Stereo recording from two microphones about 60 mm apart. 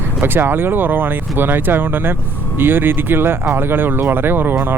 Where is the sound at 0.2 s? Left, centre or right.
Right.